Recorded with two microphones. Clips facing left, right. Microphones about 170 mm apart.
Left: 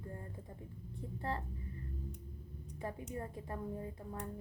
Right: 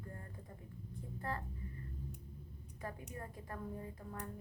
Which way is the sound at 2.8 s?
25° left (ahead or behind).